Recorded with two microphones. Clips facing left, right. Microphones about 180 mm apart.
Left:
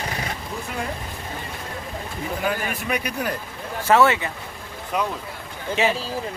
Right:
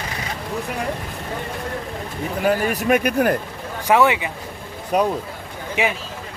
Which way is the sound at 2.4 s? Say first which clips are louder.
Right 9 dB; 40° right (ahead or behind).